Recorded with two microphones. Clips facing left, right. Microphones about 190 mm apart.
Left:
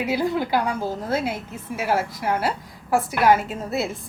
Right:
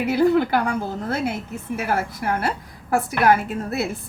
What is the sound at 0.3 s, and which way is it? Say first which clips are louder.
A woman's voice: right 4 dB; 55° right (ahead or behind).